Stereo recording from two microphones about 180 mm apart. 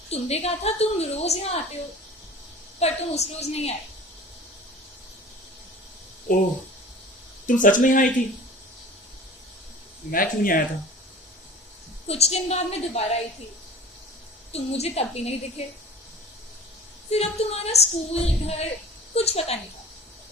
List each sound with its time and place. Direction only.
0.1 s a woman's voice: 35° left (ahead or behind)
2.8 s a woman's voice: 35° left (ahead or behind)
6.3 s speech: 50° left (ahead or behind)
7.4 s speech: 45° left (ahead or behind)
10.1 s speech: 50° left (ahead or behind)
12.0 s a woman's voice: 35° left (ahead or behind)
14.5 s a woman's voice: 35° left (ahead or behind)
17.1 s a woman's voice: 35° left (ahead or behind)